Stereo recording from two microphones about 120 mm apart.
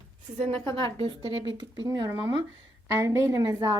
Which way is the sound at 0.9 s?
50° right (ahead or behind).